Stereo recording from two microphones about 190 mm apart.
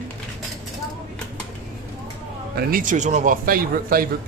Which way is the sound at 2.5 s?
45° right (ahead or behind).